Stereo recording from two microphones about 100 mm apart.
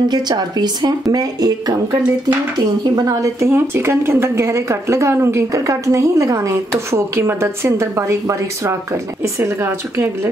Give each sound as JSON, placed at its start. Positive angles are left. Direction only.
{"t": 0.1, "sound": "a woman's voice", "side_deg": -45}